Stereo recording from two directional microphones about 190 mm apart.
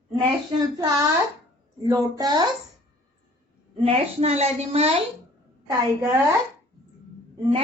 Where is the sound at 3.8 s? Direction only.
30° right (ahead or behind).